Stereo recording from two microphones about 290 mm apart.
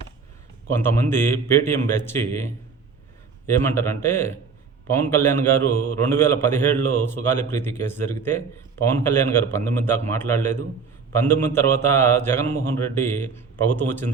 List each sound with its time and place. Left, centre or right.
0.7 s a man's voice: centre
5.7 s mantra: left
6.0 s a man's voice: centre